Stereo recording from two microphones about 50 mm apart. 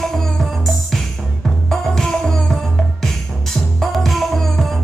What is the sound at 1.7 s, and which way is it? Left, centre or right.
Music, centre.